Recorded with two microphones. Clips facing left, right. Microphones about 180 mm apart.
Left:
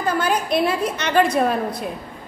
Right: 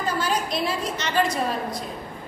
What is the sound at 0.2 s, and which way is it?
A woman's voice, 60° left (ahead or behind).